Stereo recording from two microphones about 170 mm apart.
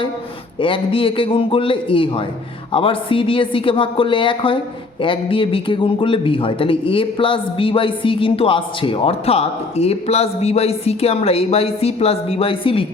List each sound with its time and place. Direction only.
0.6 s a man's voice: 30° left (ahead or behind)